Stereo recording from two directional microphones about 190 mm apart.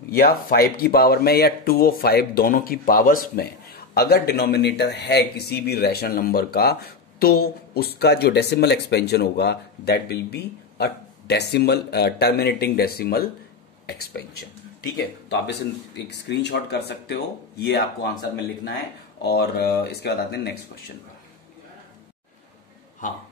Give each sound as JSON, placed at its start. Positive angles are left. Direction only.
{"t": 0.1, "sound": "speech", "side_deg": 50}
{"t": 14.8, "sound": "speech", "side_deg": 65}
{"t": 19.2, "sound": "speech", "side_deg": 55}